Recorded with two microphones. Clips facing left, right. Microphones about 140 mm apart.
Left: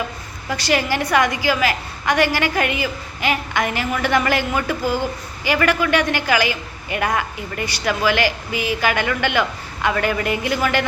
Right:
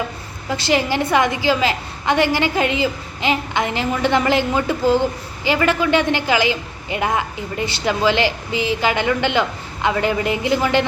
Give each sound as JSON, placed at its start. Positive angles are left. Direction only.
{"t": 0.5, "sound": "a woman's voice", "side_deg": -20}